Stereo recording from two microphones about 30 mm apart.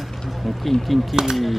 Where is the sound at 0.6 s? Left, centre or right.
Centre.